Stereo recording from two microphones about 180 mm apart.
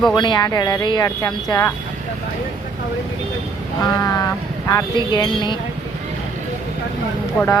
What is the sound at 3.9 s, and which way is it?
Speech, 20° left (ahead or behind).